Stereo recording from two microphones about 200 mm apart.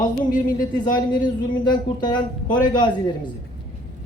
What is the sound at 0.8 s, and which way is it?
Speech, 20° left (ahead or behind).